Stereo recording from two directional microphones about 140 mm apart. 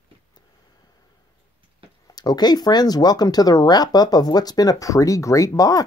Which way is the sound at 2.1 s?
30° left (ahead or behind).